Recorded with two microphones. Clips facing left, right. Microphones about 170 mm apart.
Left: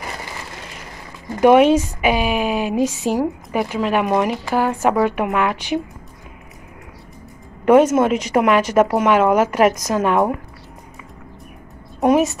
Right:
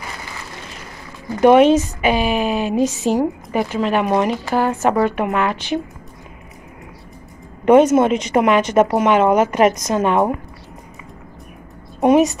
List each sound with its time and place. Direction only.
1.4 s a woman's voice: 10° left (ahead or behind)
7.6 s speech: 5° left (ahead or behind)
12.0 s speech: centre (ahead or behind)